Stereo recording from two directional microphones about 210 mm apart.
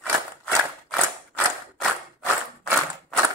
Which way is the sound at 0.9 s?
Centre (ahead or behind).